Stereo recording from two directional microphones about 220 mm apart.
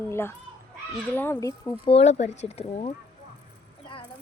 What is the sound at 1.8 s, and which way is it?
Speech, 30° left (ahead or behind).